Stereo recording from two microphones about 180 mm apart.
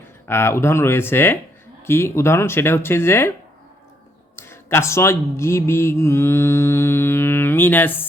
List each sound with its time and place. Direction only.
0.3 s mantra: 15° left (ahead or behind)
4.4 s mantra: 15° left (ahead or behind)